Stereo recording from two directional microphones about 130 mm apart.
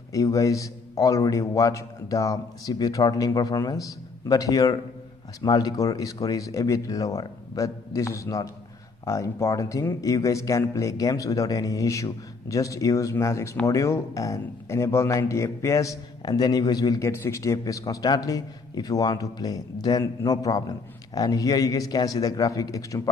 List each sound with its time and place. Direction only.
0.1 s a man's voice: 25° left (ahead or behind)